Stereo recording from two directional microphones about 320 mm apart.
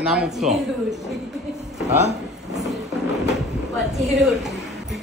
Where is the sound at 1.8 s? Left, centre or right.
Centre.